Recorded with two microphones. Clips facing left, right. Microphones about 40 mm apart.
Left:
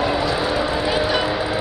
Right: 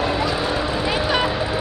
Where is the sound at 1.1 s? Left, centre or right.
Centre.